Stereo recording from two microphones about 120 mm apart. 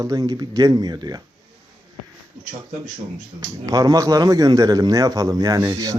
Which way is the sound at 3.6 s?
30° right (ahead or behind).